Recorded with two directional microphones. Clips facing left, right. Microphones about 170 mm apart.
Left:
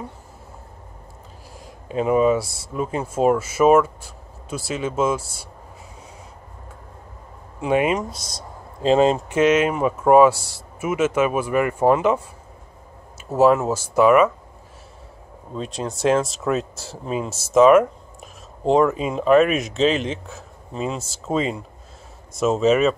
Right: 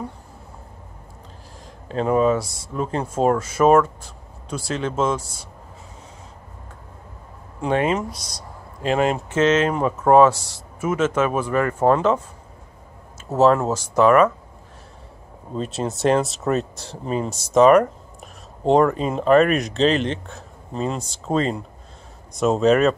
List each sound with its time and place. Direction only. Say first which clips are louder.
1.9 s speech: left 1 dB; 10° left (ahead or behind)
7.6 s speech: left 1 dB; 10° left (ahead or behind)
8.1 s speech: left 1 dB; 25° left (ahead or behind)
9.3 s speech: left 1 dB; 10° left (ahead or behind)
13.4 s speech: even; 10° left (ahead or behind)
15.5 s speech: right 2 dB; centre (ahead or behind)